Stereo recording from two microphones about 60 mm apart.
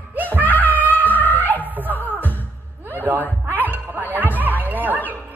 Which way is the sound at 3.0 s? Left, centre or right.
Right.